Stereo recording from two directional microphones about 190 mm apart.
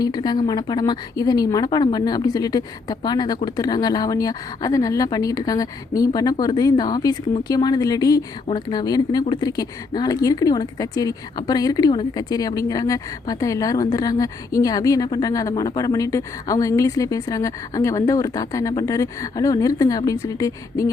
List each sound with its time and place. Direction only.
0.0 s speech: 20° left (ahead or behind)